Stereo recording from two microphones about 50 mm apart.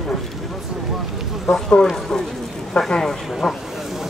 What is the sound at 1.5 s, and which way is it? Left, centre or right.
Speech, centre.